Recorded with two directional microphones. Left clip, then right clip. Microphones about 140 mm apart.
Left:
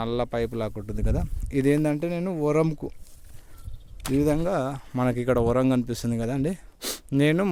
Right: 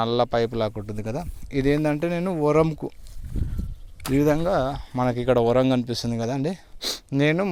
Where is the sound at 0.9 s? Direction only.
35° left (ahead or behind).